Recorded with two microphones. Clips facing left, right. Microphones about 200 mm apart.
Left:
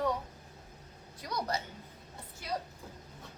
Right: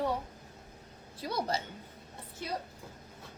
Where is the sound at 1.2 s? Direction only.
30° right (ahead or behind).